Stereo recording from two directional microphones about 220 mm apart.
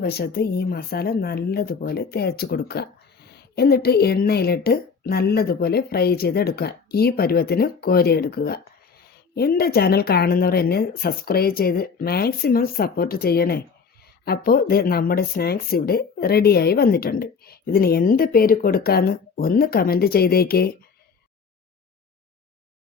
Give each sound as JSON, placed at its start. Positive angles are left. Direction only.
{"t": 0.0, "sound": "speech", "side_deg": 45}